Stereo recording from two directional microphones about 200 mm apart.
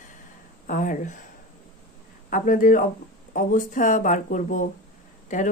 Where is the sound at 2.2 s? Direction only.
45° left (ahead or behind).